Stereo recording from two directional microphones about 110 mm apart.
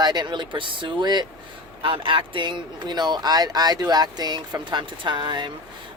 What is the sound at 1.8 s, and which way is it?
Speech, 55° right (ahead or behind).